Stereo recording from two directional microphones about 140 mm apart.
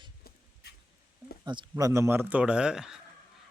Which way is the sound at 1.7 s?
20° right (ahead or behind).